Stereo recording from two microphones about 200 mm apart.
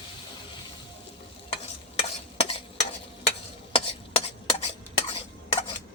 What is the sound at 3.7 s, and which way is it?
Stir, 30° left (ahead or behind).